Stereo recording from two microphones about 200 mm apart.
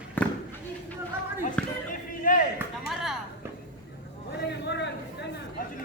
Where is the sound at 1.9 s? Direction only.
40° left (ahead or behind).